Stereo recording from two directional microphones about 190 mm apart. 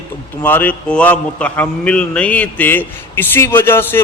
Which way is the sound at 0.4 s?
10° left (ahead or behind).